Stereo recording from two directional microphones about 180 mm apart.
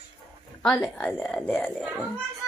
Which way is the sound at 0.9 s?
5° left (ahead or behind).